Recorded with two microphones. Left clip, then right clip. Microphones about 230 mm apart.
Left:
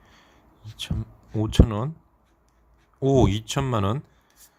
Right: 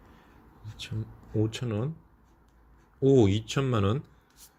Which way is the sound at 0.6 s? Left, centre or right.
Left.